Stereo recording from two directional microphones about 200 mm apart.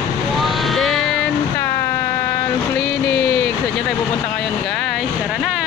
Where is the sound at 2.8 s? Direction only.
55° left (ahead or behind).